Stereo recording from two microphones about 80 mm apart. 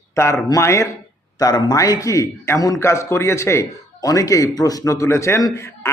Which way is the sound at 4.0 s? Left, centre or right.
Left.